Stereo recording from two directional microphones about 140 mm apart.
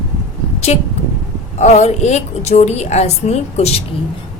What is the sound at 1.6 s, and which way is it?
A woman's voice, 55° left (ahead or behind).